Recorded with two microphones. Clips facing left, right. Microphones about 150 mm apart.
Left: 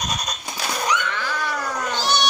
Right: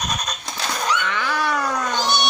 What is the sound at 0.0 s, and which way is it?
Neigh, 10° left (ahead or behind).